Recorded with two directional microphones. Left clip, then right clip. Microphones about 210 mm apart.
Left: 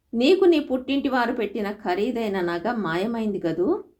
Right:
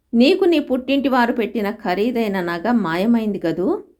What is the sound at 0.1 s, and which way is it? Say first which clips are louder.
A woman's voice: right 3 dB; 35° right (ahead or behind).